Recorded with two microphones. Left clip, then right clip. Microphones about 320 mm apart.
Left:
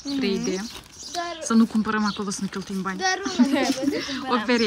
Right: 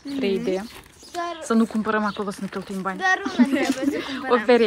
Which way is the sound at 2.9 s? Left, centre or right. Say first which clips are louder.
Right 3 dB; right.